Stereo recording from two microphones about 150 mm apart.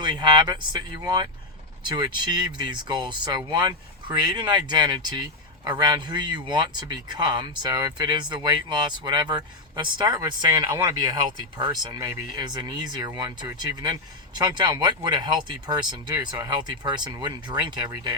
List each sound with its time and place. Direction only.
0.0 s speech: 30° right (ahead or behind)